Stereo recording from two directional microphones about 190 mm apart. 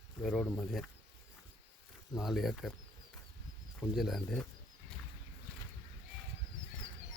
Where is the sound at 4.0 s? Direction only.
Centre (ahead or behind).